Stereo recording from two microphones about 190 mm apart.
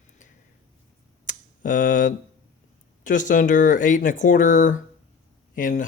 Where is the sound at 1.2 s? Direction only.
45° left (ahead or behind).